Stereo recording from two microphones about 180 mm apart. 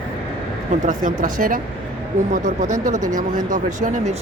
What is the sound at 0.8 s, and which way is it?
Speech, 45° right (ahead or behind).